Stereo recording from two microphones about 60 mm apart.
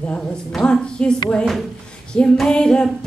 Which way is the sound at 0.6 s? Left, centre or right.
Centre.